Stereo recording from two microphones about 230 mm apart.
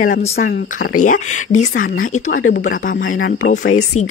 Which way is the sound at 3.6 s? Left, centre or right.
Left.